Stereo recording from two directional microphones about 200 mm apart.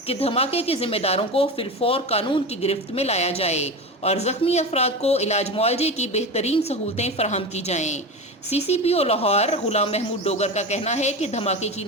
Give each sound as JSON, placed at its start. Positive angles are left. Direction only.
{"t": 0.1, "sound": "speech", "side_deg": 30}